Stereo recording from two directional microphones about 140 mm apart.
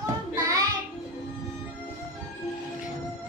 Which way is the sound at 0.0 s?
25° right (ahead or behind).